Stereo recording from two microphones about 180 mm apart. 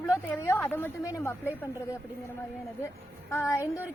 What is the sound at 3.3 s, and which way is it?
Speech, 15° left (ahead or behind).